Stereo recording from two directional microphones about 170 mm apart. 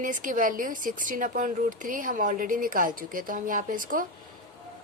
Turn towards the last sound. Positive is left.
turn(degrees=-55)  # may be behind; listen again after turning